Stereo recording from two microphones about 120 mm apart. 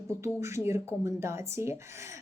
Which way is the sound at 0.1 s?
20° right (ahead or behind).